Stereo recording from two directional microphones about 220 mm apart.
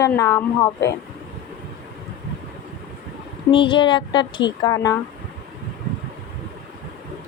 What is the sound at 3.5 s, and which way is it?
Speech, 20° left (ahead or behind).